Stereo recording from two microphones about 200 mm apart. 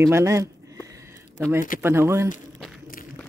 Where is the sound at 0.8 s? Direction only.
15° right (ahead or behind).